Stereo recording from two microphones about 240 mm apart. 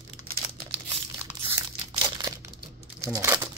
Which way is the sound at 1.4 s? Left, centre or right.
Right.